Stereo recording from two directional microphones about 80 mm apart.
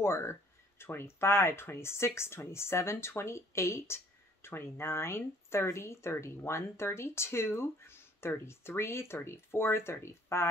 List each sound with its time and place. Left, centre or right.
0.0 s speech: left